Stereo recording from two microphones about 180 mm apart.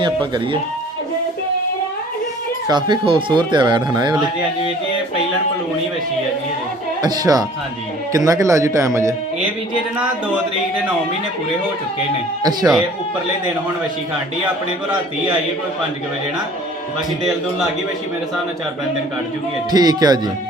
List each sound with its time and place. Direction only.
0.0 s speech: 25° right (ahead or behind)
2.6 s speech: 25° right (ahead or behind)
7.0 s speech: 20° right (ahead or behind)
19.7 s speech: 20° right (ahead or behind)